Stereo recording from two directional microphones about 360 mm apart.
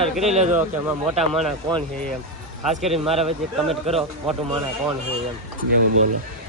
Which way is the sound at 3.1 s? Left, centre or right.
Centre.